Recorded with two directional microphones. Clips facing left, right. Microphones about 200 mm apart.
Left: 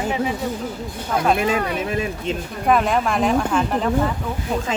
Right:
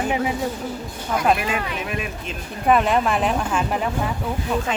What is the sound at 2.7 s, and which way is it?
Speech, centre (ahead or behind).